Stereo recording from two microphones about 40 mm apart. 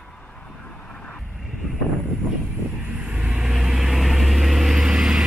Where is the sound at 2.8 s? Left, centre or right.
Right.